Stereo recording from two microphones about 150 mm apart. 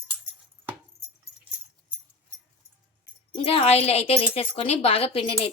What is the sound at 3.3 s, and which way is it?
A woman's voice, 40° left (ahead or behind).